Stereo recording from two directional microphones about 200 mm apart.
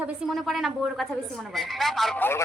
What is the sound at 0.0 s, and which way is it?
A woman's voice, centre (ahead or behind).